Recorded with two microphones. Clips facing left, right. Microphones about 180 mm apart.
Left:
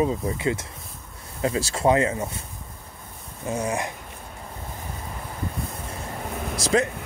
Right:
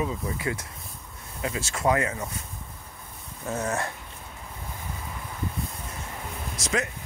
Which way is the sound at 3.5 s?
15° left (ahead or behind).